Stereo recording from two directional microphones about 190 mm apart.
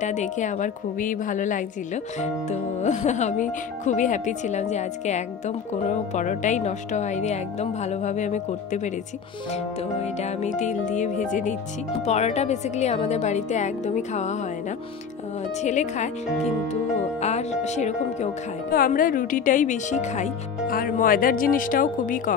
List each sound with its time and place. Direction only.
0.0 s speech: 40° left (ahead or behind)
10.0 s speech: 35° left (ahead or behind)
15.6 s speech: 40° left (ahead or behind)
17.2 s speech: 35° left (ahead or behind)